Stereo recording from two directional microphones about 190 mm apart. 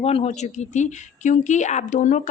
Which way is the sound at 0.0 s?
30° left (ahead or behind).